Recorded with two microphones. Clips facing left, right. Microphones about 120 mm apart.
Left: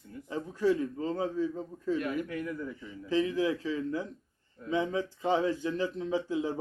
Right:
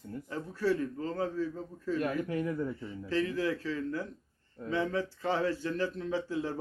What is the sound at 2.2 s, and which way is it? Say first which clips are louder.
Speech: right 3 dB; 30° right (ahead or behind).